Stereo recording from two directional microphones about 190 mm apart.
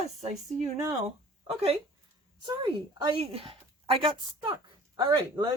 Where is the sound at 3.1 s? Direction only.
30° right (ahead or behind).